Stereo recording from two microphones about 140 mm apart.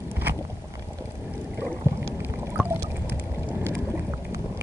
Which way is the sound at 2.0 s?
20° right (ahead or behind).